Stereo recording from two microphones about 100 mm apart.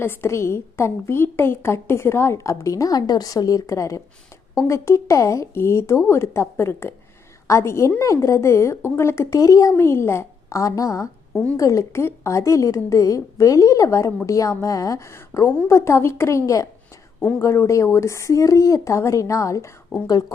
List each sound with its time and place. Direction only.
0.0 s a woman's voice: 25° left (ahead or behind)